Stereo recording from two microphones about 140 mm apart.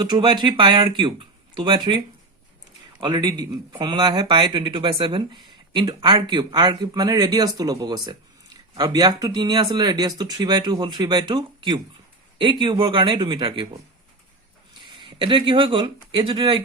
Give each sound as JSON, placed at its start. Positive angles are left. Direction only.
{"t": 0.0, "sound": "speech", "side_deg": -35}
{"t": 15.0, "sound": "speech", "side_deg": -35}